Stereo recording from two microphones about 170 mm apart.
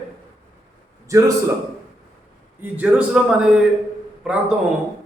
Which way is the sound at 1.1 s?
20° right (ahead or behind).